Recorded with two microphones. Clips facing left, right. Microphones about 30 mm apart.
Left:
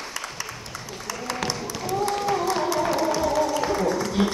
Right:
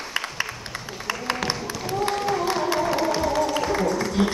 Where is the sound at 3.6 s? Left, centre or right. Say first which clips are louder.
Right 1 dB; centre.